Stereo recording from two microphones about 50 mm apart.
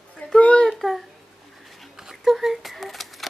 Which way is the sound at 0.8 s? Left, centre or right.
Centre.